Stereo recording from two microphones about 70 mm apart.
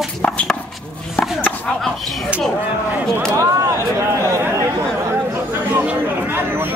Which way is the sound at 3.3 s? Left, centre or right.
Right.